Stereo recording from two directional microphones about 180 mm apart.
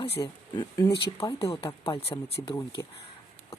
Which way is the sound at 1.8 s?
30° left (ahead or behind).